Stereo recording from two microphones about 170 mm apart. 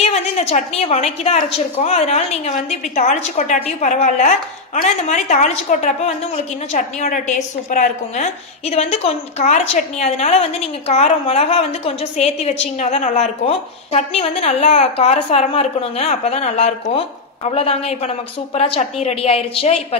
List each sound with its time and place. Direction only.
0.0 s a woman's voice: 40° left (ahead or behind)